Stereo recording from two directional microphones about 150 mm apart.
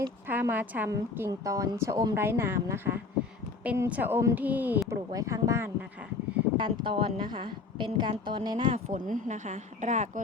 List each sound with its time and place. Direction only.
0.0 s speech: 15° right (ahead or behind)
6.6 s a woman's voice: 35° right (ahead or behind)
8.9 s speech: 60° right (ahead or behind)